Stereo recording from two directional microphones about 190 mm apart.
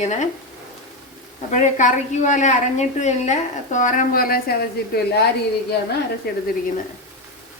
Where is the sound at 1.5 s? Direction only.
40° left (ahead or behind).